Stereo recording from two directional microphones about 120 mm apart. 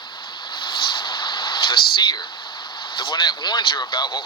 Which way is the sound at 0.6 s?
40° left (ahead or behind).